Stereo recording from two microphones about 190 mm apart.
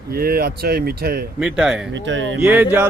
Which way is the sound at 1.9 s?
75° right (ahead or behind).